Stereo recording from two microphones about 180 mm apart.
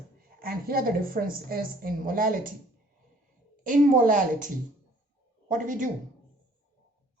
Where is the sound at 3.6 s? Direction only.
50° right (ahead or behind).